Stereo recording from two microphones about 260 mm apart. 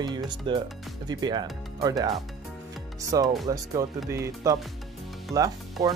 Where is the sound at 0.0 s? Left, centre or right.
Centre.